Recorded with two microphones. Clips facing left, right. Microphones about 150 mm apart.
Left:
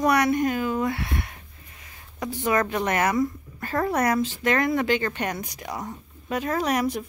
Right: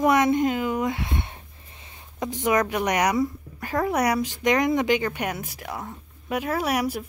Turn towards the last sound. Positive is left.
turn(degrees=-10)  # may be behind; listen again after turning